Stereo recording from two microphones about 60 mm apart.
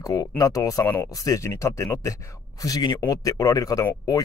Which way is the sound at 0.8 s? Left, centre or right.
Left.